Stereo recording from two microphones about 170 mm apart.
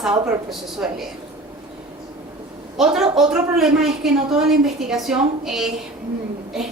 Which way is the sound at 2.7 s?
5° right (ahead or behind).